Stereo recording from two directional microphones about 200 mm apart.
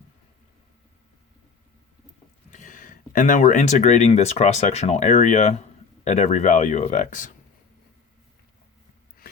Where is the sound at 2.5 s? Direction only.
40° left (ahead or behind).